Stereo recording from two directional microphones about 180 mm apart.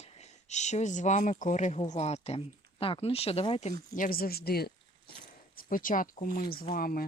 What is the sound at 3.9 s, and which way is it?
Speech, 50° left (ahead or behind).